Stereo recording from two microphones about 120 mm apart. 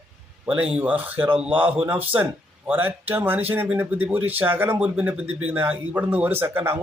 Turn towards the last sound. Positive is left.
turn(degrees=-20)  # may be behind; listen again after turning